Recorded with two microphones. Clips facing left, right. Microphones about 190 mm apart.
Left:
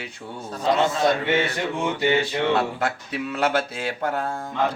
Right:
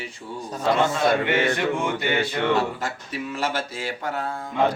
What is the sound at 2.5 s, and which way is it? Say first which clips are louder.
Speech: left 1 dB; 65° left (ahead or behind).